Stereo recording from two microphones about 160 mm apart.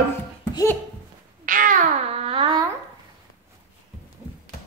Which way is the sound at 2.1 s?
35° right (ahead or behind).